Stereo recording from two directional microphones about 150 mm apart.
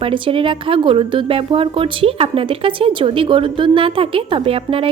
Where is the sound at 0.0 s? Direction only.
35° right (ahead or behind).